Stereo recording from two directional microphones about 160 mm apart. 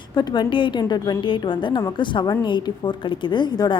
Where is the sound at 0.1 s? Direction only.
25° left (ahead or behind).